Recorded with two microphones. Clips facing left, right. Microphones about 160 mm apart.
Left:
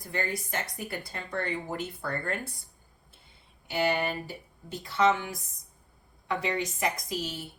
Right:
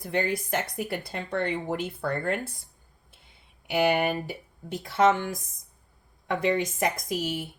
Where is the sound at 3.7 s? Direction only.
55° right (ahead or behind).